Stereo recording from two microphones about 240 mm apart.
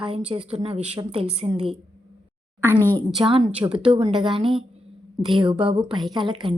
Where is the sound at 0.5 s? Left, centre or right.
Right.